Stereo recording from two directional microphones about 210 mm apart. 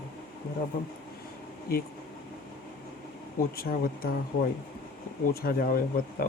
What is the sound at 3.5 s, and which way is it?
Speech, 45° left (ahead or behind).